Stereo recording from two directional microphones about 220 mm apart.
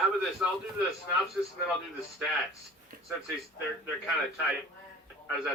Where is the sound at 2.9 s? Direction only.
40° right (ahead or behind).